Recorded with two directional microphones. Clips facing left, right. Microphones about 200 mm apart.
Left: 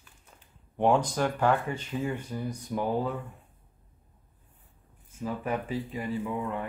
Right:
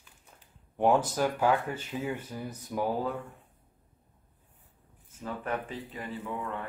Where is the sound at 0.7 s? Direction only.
5° right (ahead or behind).